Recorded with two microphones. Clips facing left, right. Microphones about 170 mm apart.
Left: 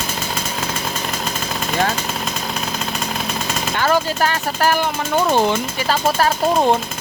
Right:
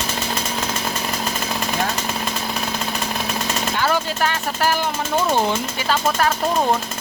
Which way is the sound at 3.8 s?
45° left (ahead or behind).